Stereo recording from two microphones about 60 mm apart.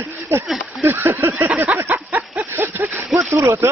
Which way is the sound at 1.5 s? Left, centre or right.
Right.